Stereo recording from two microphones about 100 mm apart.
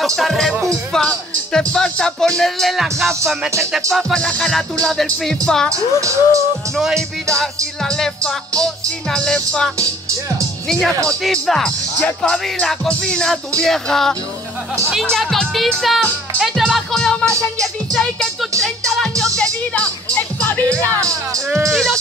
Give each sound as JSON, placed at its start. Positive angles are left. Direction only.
{"t": 0.0, "sound": "speech", "side_deg": 0}
{"t": 0.9, "sound": "music", "side_deg": 5}
{"t": 3.9, "sound": "speech", "side_deg": 5}
{"t": 5.7, "sound": "speech", "side_deg": -30}
{"t": 6.8, "sound": "speech", "side_deg": 0}
{"t": 9.1, "sound": "music", "side_deg": 5}
{"t": 11.1, "sound": "music", "side_deg": 5}
{"t": 13.6, "sound": "speech", "side_deg": 5}
{"t": 19.3, "sound": "music", "side_deg": 10}